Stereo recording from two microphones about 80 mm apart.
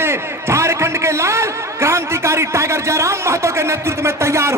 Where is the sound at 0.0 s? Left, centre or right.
Right.